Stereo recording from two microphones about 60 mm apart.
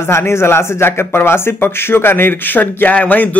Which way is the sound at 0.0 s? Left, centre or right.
Left.